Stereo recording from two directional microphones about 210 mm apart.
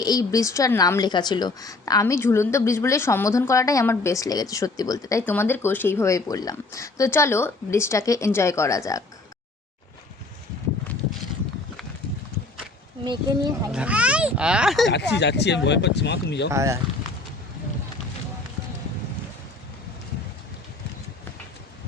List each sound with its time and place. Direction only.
0.0 s a woman's voice: 15° left (ahead or behind)
13.7 s speech: 5° right (ahead or behind)
14.9 s speech: 55° left (ahead or behind)
16.5 s speech: 15° right (ahead or behind)